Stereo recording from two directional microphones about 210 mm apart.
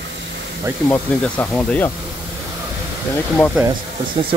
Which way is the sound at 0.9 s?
5° left (ahead or behind).